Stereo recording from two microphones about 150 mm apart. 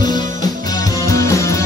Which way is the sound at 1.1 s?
20° left (ahead or behind).